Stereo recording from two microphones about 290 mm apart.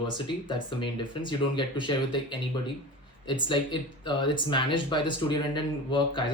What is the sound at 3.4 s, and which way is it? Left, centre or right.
Speech, centre.